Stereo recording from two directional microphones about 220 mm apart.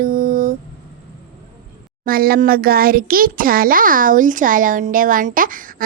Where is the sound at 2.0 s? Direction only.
40° right (ahead or behind).